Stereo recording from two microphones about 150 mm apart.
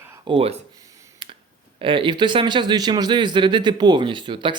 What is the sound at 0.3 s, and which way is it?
Speech, 40° right (ahead or behind).